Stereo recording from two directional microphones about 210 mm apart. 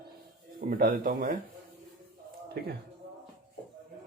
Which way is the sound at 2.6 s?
45° right (ahead or behind).